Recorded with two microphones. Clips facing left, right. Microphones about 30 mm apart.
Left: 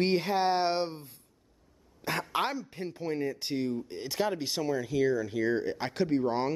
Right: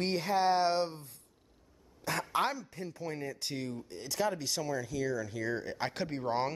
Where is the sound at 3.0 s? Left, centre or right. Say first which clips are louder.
Left 7 dB; left.